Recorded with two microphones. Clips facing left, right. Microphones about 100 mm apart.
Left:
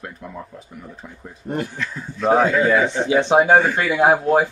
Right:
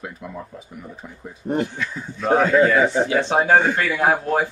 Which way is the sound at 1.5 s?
20° right (ahead or behind).